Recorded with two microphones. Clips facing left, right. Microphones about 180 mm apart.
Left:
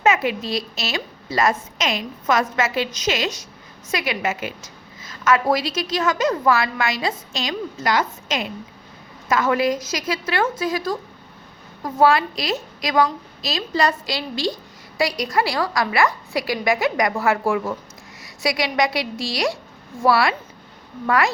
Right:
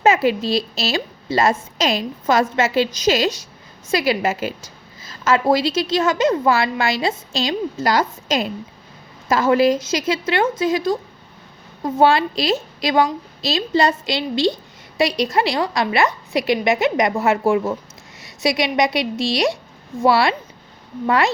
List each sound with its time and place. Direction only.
0.0 s a woman's voice: 30° right (ahead or behind)